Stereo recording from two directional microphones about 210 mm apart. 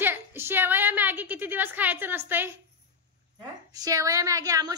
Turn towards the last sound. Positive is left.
turn(degrees=-15)  # may be behind; listen again after turning